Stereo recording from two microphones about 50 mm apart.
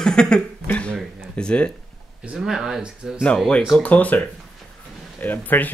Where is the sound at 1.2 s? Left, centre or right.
Centre.